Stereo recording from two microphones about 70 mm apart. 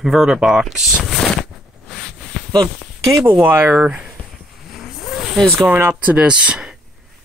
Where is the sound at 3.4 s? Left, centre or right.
Right.